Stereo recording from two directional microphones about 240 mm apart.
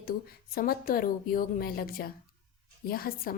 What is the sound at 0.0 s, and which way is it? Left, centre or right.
A woman's voice, left.